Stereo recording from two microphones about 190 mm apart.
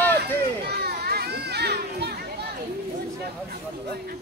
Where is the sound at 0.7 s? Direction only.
55° right (ahead or behind).